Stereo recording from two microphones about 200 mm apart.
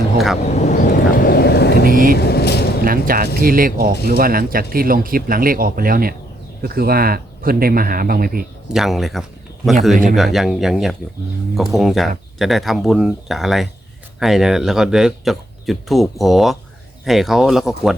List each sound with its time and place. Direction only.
0.4 s vehicle: 35° left (ahead or behind); by 1.9 s 55° left (ahead or behind)
1.9 s speech: 45° right (ahead or behind)
2.1 s vehicle: 55° left (ahead or behind)
2.8 s speech: 45° right (ahead or behind)
8.7 s speech: centre (ahead or behind)